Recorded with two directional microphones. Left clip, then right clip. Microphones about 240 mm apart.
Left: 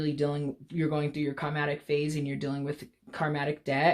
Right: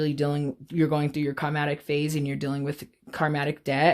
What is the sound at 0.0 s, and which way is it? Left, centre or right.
Speech, right.